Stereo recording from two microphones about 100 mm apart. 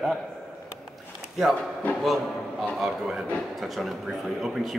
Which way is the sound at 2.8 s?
5° right (ahead or behind).